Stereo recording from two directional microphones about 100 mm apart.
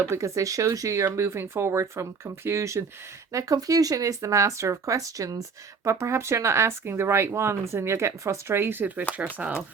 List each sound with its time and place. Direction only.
0.1 s speech: 30° right (ahead or behind); by 9.6 s 15° right (ahead or behind)